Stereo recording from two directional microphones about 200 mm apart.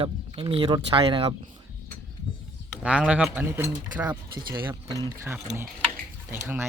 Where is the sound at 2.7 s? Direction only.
5° right (ahead or behind).